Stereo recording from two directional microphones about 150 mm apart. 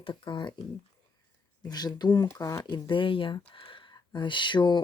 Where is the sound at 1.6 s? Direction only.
25° left (ahead or behind).